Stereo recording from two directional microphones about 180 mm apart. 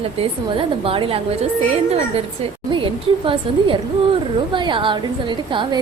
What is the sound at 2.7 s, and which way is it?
A woman's voice, 30° right (ahead or behind).